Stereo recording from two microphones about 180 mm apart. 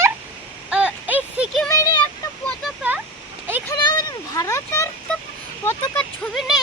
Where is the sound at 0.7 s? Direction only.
10° right (ahead or behind).